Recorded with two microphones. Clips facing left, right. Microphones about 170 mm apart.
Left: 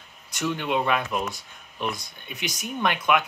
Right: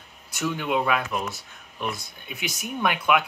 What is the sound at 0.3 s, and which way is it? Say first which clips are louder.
Speech: even; 5° right (ahead or behind).